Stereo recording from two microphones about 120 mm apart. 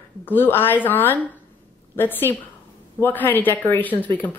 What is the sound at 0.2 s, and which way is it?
Speech, 15° left (ahead or behind).